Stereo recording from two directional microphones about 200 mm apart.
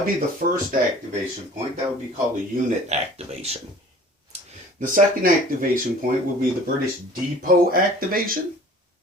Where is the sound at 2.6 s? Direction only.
30° right (ahead or behind).